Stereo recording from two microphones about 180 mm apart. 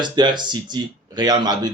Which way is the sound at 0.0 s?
25° right (ahead or behind).